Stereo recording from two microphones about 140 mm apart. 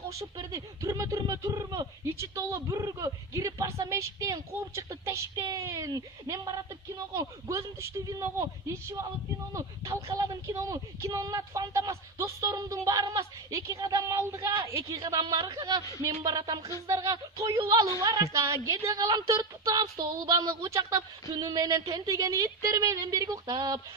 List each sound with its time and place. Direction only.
0.1 s speech: 25° right (ahead or behind)
15.0 s speech: 30° right (ahead or behind)